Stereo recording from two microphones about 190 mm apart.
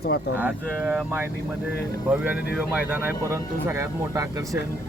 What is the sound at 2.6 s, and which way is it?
Speech, 10° right (ahead or behind).